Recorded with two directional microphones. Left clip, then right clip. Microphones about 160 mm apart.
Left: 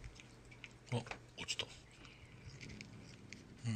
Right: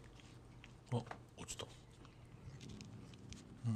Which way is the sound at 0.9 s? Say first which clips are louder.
Left 1 dB; 25° right (ahead or behind).